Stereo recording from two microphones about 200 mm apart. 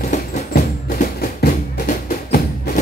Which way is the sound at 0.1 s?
35° left (ahead or behind).